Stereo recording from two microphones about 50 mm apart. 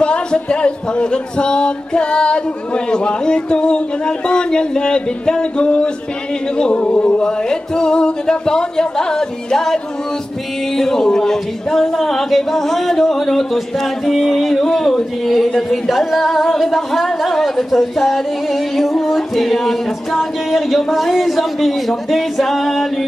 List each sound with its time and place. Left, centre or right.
0.0 s speech: centre
6.5 s a sound: left
10.8 s speech: centre